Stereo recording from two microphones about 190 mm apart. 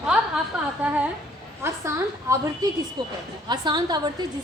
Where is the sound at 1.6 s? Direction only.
15° right (ahead or behind).